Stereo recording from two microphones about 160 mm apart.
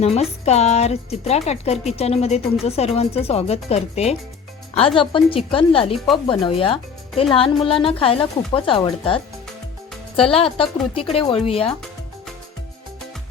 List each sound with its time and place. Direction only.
0.0 s speech: 40° left (ahead or behind)
10.3 s speech: 35° left (ahead or behind)